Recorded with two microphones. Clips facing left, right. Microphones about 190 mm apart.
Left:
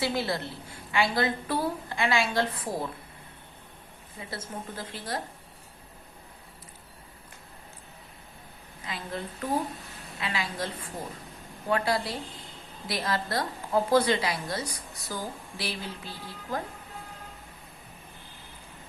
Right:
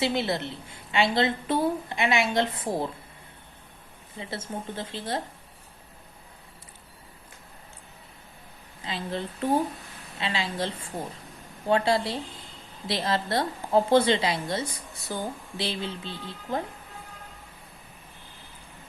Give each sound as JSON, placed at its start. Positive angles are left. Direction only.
{"t": 0.0, "sound": "a woman's voice", "side_deg": -20}
{"t": 4.2, "sound": "a woman's voice", "side_deg": -25}
{"t": 8.8, "sound": "a woman's voice", "side_deg": -25}
{"t": 11.7, "sound": "a woman's voice", "side_deg": -25}